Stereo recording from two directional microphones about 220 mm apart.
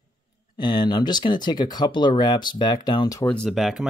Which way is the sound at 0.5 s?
20° left (ahead or behind).